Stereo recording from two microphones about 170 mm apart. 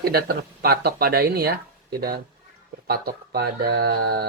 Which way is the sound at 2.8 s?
65° right (ahead or behind).